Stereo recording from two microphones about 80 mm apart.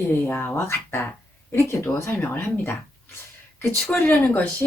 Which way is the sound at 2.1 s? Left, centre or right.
Left.